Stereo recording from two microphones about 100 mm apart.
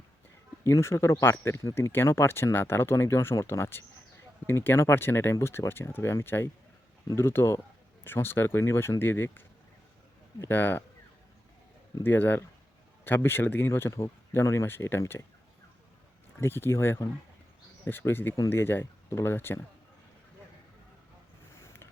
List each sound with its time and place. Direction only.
0.6 s speech: 30° left (ahead or behind)
10.5 s speech: 20° left (ahead or behind)
12.0 s speech: 20° left (ahead or behind)
16.4 s speech: 25° left (ahead or behind)